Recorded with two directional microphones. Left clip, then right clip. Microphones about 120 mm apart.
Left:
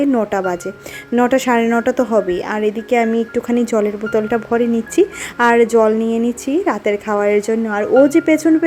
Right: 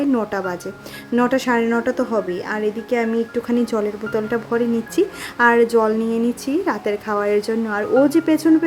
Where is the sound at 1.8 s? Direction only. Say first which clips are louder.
Left 5 dB; 35° left (ahead or behind).